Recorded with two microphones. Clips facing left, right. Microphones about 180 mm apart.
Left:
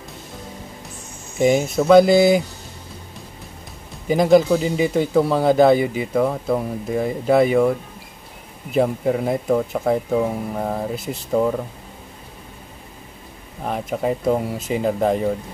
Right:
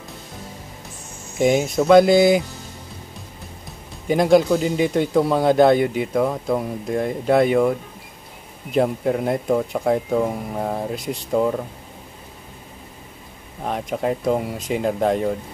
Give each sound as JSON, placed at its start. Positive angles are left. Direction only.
{"t": 1.4, "sound": "speech", "side_deg": 0}
{"t": 4.1, "sound": "speech", "side_deg": 0}
{"t": 8.8, "sound": "speech", "side_deg": 0}
{"t": 13.7, "sound": "speech", "side_deg": 0}